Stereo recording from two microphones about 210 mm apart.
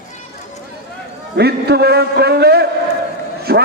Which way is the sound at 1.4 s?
50° right (ahead or behind).